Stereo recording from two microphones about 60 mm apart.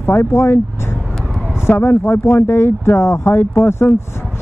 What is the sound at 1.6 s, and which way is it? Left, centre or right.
Speech, left.